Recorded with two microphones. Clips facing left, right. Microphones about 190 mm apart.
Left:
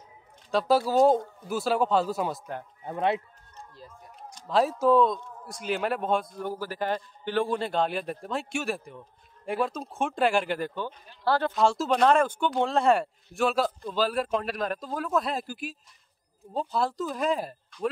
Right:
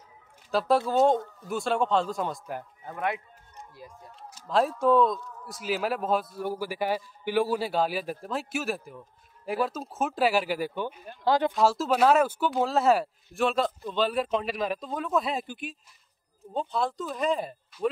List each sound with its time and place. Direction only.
0.5 s speech: centre (ahead or behind)
2.8 s speech: 25° left (ahead or behind)
3.5 s speech: 10° right (ahead or behind)
11.5 s speech: centre (ahead or behind)